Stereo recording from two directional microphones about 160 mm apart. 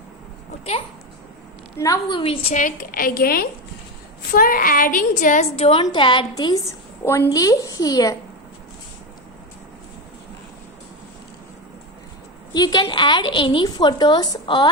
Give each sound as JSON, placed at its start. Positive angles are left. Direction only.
{"t": 1.8, "sound": "a woman's voice", "side_deg": 25}
{"t": 5.5, "sound": "a woman's voice", "side_deg": 35}
{"t": 12.5, "sound": "a woman's voice", "side_deg": 25}